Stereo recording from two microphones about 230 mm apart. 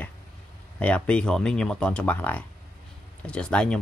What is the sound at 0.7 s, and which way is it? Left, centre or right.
Speech, centre.